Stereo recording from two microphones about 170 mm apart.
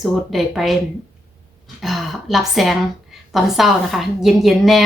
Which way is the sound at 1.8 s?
Centre (ahead or behind).